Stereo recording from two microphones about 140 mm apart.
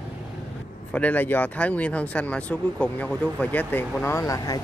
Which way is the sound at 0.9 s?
10° left (ahead or behind).